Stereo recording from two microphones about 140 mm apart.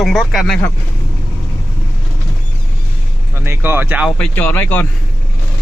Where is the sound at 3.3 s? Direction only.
15° right (ahead or behind).